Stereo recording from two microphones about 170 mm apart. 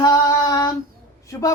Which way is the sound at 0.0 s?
20° left (ahead or behind).